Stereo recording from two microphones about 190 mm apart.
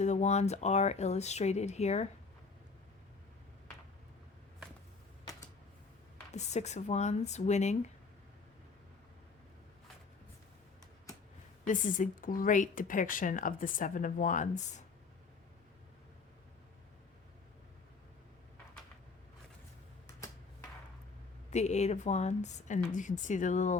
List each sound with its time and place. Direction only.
0.0 s a woman's voice: 35° left (ahead or behind)
6.3 s a woman's voice: 35° left (ahead or behind)
11.6 s speech: 45° left (ahead or behind)
21.5 s a woman's voice: 35° left (ahead or behind)